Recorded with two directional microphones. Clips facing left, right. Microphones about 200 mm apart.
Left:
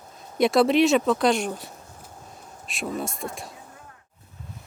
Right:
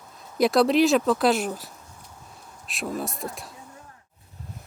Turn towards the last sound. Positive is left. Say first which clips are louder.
# left 1 dB
turn(degrees=0)  # may be behind; listen again after turning